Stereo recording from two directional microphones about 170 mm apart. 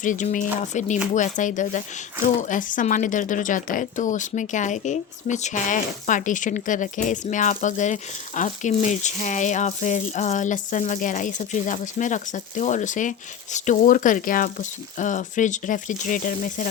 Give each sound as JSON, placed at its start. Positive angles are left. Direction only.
{"t": 0.0, "sound": "speech", "side_deg": 50}